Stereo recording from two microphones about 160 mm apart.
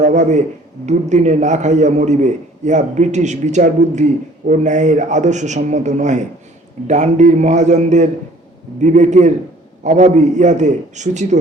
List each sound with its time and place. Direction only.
0.0 s a man's voice: 50° right (ahead or behind)